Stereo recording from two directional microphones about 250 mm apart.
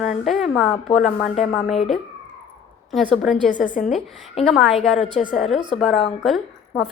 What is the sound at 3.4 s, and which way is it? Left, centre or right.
Speech, left.